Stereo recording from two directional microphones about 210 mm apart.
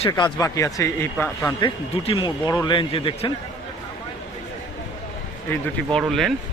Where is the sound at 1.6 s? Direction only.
20° left (ahead or behind).